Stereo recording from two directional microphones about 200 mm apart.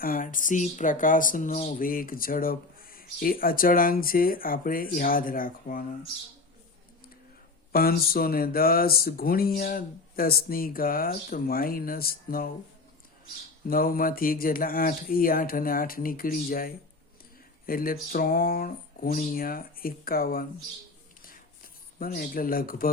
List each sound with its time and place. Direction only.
0.0 s speech: 45° left (ahead or behind)
7.7 s speech: 50° left (ahead or behind)
13.7 s speech: 45° left (ahead or behind)
21.9 s speech: 45° left (ahead or behind)